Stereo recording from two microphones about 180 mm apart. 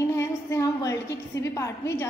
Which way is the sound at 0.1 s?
15° left (ahead or behind).